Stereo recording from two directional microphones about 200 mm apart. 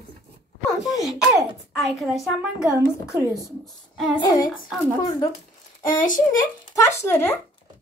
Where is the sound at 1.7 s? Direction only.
Centre (ahead or behind).